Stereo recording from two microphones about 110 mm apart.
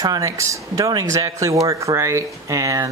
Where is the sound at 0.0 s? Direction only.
30° right (ahead or behind).